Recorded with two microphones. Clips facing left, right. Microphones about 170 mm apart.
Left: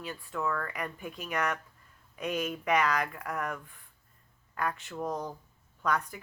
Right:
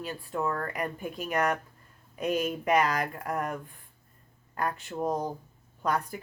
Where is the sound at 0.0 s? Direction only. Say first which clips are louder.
Right 3 dB; 40° right (ahead or behind).